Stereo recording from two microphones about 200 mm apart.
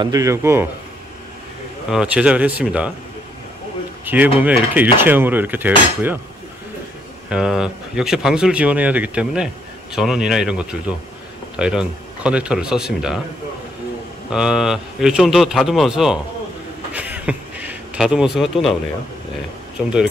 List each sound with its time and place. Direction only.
0.0 s speech: 15° right (ahead or behind)
1.9 s speech: 5° right (ahead or behind)
4.0 s speech: 10° right (ahead or behind)
7.2 s speech: 5° right (ahead or behind)
14.3 s speech: 5° right (ahead or behind)
16.9 s a sound: 5° right (ahead or behind)